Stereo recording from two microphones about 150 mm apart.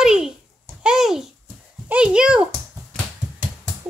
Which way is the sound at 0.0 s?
5° right (ahead or behind).